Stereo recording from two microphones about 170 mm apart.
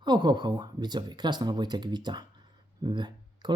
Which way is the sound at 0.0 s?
25° right (ahead or behind).